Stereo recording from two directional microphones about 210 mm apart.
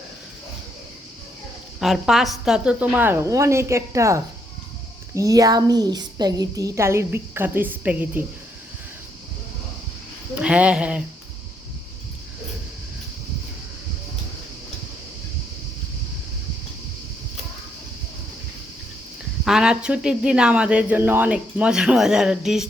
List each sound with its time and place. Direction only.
1.8 s a woman's voice: centre (ahead or behind)
10.3 s speech: 5° right (ahead or behind)
19.5 s speech: 5° right (ahead or behind)